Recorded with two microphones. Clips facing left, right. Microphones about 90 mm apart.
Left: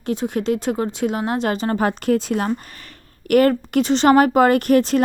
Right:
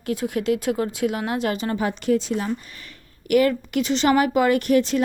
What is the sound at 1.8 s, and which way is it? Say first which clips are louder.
Speech: left 1 dB; 50° left (ahead or behind).